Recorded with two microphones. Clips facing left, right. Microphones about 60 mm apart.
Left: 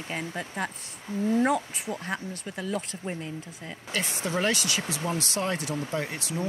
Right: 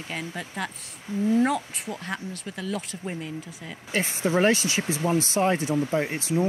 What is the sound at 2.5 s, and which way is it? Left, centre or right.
Speech, left.